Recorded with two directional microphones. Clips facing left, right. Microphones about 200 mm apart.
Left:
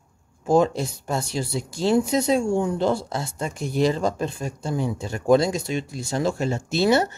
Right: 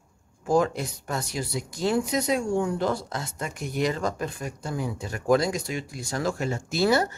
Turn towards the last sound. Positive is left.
turn(degrees=25)  # may be behind; listen again after turning